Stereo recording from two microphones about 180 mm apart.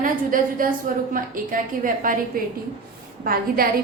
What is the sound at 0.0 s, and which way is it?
A woman's voice, 50° right (ahead or behind).